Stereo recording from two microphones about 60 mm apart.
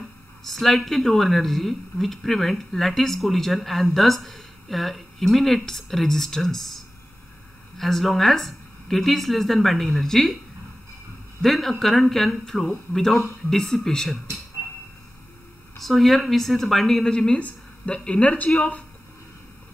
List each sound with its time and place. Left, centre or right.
0.4 s a woman's voice: centre
11.4 s a woman's voice: centre
15.8 s a woman's voice: centre